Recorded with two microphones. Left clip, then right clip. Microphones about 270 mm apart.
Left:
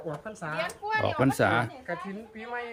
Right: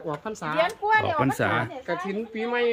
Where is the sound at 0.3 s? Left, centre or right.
Right.